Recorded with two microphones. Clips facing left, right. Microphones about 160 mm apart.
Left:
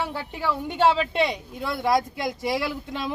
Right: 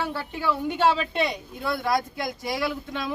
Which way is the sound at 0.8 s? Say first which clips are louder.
Left 3 dB; 25° left (ahead or behind).